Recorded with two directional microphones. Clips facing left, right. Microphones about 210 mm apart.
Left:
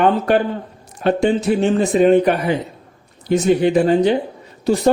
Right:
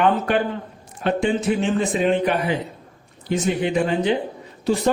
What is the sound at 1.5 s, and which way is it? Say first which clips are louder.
Speech: left 5 dB; 40° left (ahead or behind).